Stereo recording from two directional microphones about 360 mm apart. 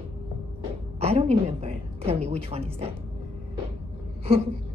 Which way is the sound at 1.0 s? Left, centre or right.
Centre.